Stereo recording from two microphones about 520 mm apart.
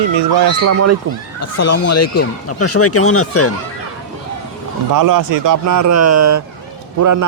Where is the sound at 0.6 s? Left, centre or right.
Right.